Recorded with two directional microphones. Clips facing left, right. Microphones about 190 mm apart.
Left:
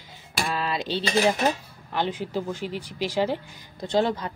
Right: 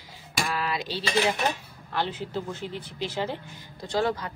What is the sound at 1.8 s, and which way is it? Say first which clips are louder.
Speech: left 3 dB; 15° left (ahead or behind).